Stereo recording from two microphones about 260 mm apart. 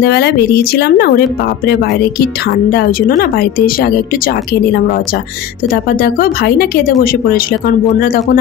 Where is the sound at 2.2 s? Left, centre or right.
Left.